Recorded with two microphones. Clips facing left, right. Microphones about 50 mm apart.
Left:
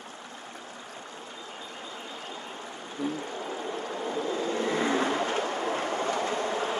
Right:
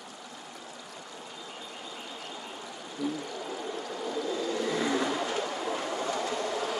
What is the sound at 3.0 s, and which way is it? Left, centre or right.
Vehicle, left.